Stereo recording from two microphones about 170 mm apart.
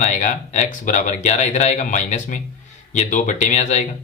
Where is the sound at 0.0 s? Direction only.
45° left (ahead or behind).